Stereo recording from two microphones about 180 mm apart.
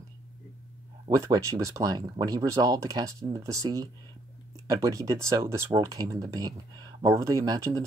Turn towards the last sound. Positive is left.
turn(degrees=-15)  # may be behind; listen again after turning